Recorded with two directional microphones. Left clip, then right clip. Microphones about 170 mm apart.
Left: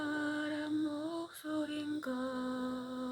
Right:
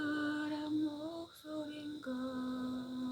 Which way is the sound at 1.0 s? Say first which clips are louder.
Left 4 dB; 20° left (ahead or behind).